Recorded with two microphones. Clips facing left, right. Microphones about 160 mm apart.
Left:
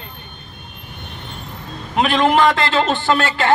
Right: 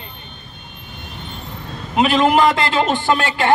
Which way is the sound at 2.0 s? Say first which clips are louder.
Right 1 dB; 5° right (ahead or behind).